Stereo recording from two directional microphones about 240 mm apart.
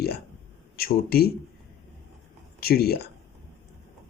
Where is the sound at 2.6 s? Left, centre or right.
Left.